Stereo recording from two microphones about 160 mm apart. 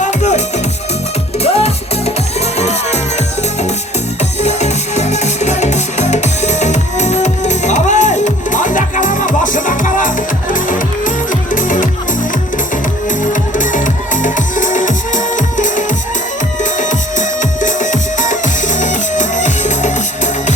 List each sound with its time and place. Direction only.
0.0 s music: 50° left (ahead or behind)
13.1 s music: 55° left (ahead or behind)